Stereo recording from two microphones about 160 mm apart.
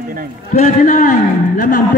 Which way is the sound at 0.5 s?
45° left (ahead or behind).